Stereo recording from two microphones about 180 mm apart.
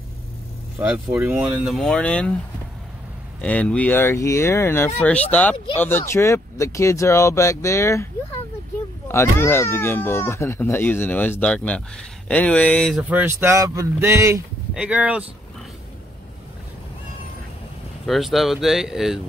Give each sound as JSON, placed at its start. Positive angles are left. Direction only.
{"t": 0.7, "sound": "speech", "side_deg": -5}
{"t": 3.3, "sound": "speech", "side_deg": 5}
{"t": 13.1, "sound": "speech", "side_deg": -15}
{"t": 18.0, "sound": "speech", "side_deg": 0}